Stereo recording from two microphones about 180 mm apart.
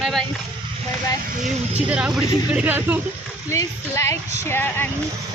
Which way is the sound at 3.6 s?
15° left (ahead or behind).